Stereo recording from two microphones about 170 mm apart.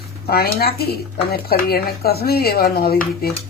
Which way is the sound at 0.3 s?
65° left (ahead or behind).